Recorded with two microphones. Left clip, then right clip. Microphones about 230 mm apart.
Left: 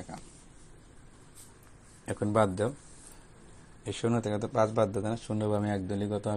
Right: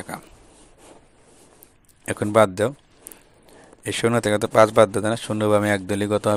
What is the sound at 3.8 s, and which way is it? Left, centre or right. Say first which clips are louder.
A man's voice: right 11 dB; right.